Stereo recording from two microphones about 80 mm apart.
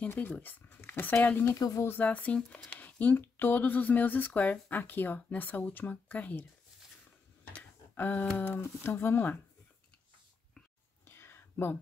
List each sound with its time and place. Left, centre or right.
0.0 s speech: centre
1.5 s speech: left
1.9 s speech: left
7.5 s a sound: left
8.4 s speech: left
11.1 s a sound: left